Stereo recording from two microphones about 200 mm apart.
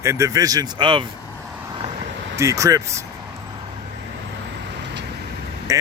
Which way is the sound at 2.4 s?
15° right (ahead or behind).